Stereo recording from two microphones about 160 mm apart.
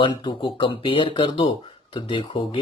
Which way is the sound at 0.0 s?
30° left (ahead or behind).